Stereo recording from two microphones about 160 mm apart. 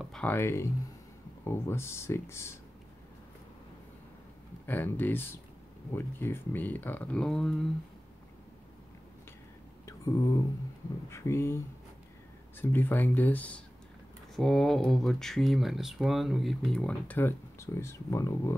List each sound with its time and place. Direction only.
0.0 s speech: 5° left (ahead or behind)
4.6 s speech: 10° left (ahead or behind)
9.8 s a sound: 20° left (ahead or behind)
11.1 s speech: 15° left (ahead or behind)